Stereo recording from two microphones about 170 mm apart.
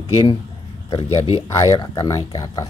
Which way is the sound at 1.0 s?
35° left (ahead or behind).